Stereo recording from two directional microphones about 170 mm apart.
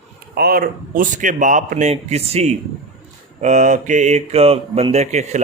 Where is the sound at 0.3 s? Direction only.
65° right (ahead or behind).